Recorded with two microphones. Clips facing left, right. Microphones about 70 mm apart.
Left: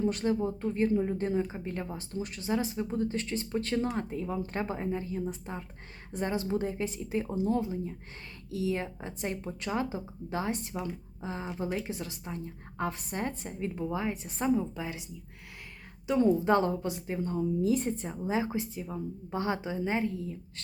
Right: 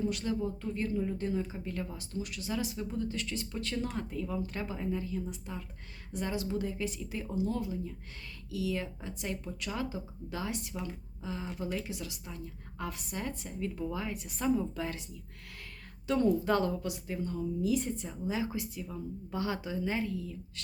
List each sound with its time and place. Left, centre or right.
0.0 s a woman's voice: left